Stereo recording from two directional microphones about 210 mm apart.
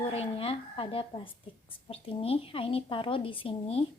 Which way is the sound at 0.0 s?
25° left (ahead or behind).